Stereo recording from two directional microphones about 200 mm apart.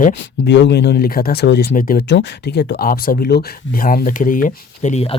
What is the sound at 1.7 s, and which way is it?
Speech, 45° left (ahead or behind).